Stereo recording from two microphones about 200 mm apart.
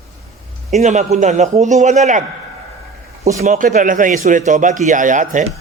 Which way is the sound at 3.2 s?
35° right (ahead or behind).